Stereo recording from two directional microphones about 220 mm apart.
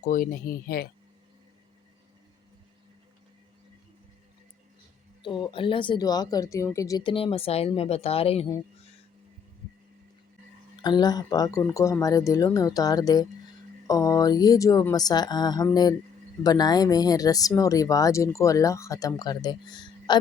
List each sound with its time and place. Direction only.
0.0 s speech: 40° left (ahead or behind)
5.2 s speech: 20° left (ahead or behind)
10.8 s speech: 20° left (ahead or behind)